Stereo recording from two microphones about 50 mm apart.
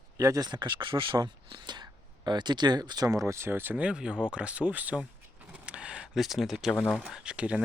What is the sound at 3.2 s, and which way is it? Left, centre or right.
Speech, right.